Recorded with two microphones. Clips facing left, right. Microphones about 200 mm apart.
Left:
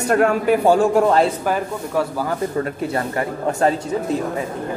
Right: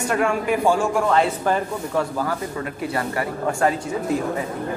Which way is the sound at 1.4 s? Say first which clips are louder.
Even; 10° left (ahead or behind).